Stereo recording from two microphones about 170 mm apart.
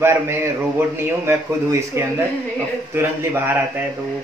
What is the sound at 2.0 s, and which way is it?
Speech, 15° right (ahead or behind).